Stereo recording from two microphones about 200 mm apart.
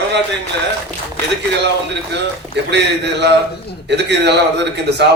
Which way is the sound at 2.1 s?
60° right (ahead or behind).